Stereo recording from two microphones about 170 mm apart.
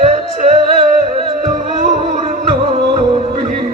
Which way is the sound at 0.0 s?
40° right (ahead or behind).